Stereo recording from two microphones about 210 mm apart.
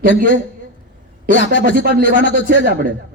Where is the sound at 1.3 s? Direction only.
60° left (ahead or behind).